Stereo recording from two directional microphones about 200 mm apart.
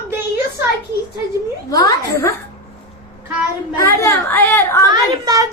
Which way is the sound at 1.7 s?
15° left (ahead or behind).